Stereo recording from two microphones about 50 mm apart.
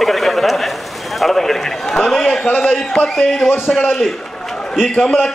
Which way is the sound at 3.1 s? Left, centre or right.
Centre.